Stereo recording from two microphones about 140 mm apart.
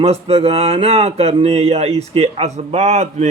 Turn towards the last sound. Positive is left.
turn(degrees=-55)  # may be behind; listen again after turning